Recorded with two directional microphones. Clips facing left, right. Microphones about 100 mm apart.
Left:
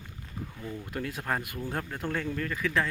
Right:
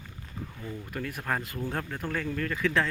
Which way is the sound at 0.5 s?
Centre (ahead or behind).